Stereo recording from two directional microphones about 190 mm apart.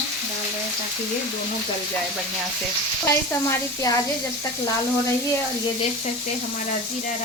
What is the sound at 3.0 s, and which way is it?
Speech, 15° left (ahead or behind).